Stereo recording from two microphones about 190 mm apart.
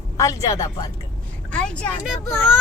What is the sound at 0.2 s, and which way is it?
Speech, 15° left (ahead or behind).